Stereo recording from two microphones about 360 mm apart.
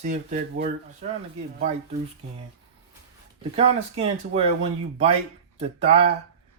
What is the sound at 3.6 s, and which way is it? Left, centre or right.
Speech, centre.